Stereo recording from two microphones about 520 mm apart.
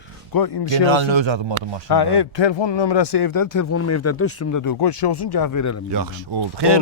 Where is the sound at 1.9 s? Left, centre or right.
Left.